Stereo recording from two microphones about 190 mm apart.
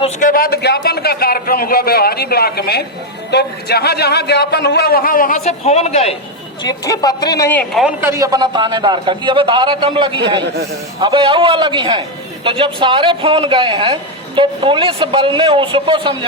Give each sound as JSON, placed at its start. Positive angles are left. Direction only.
{"t": 0.2, "sound": "a man's voice", "side_deg": 50}
{"t": 5.4, "sound": "a man's voice", "side_deg": 35}
{"t": 6.6, "sound": "speech", "side_deg": 20}
{"t": 8.0, "sound": "a man's voice", "side_deg": -15}